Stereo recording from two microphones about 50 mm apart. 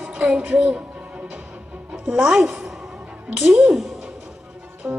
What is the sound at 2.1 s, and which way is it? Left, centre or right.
Child singing, centre.